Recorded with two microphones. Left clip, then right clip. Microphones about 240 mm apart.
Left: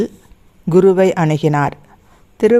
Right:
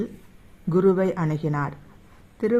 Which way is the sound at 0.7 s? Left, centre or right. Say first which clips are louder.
Left 10 dB; left.